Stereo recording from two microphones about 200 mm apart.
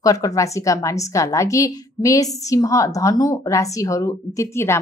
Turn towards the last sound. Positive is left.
turn(degrees=15)  # may be behind; listen again after turning